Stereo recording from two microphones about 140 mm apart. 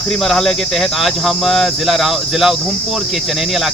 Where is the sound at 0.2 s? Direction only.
Centre (ahead or behind).